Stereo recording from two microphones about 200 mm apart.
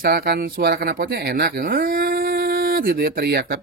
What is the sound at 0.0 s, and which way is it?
Speech, 50° right (ahead or behind).